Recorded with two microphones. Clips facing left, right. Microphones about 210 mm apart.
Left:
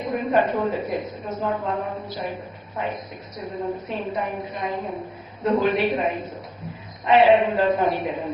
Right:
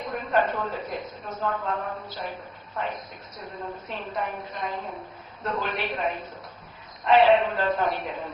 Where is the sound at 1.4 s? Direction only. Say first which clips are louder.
Left 3 dB; 15° left (ahead or behind).